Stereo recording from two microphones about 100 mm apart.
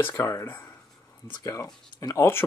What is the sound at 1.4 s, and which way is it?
Speech, 35° left (ahead or behind).